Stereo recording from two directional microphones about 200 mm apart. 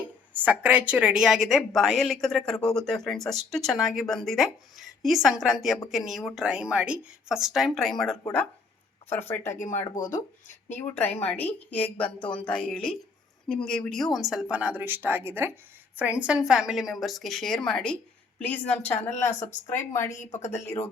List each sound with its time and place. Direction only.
0.3 s a woman's voice: 10° right (ahead or behind); by 9.6 s 10° left (ahead or behind)
9.9 s speech: 40° left (ahead or behind)
10.7 s a woman's voice: 10° left (ahead or behind)
19.1 s speech: 35° left (ahead or behind)